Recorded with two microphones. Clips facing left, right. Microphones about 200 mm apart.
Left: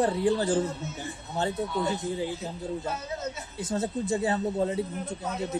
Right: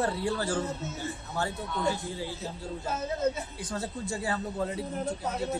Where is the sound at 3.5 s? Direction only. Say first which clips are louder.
Left 6 dB; 25° left (ahead or behind).